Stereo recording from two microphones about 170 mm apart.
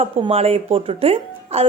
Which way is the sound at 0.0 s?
35° right (ahead or behind).